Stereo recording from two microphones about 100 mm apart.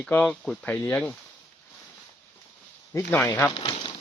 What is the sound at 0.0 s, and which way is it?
Speech, 10° left (ahead or behind).